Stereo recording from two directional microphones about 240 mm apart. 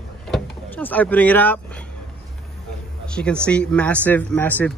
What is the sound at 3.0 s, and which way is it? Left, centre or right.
Speech, centre.